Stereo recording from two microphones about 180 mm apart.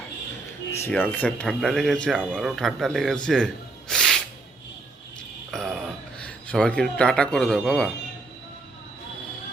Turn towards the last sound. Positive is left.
turn(degrees=5)  # may be behind; listen again after turning